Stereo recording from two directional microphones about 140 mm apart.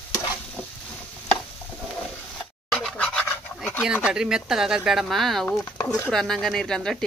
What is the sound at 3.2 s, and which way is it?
Dog, 15° left (ahead or behind).